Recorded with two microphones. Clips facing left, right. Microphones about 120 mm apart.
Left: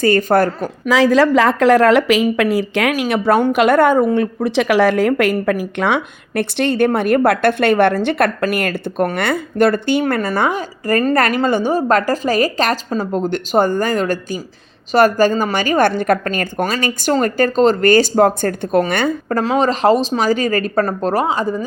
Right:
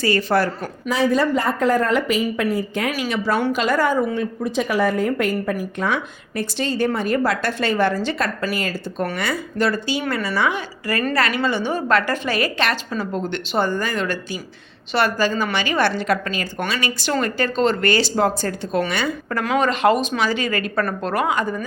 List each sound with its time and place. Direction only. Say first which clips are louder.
0.0 s a woman's voice: left 5 dB; 50° left (ahead or behind)
0.9 s a woman's voice: left 6 dB; 90° left
2.9 s a woman's voice: left 7 dB; 60° left (ahead or behind)
19.4 s speech: left 3 dB; 30° left (ahead or behind)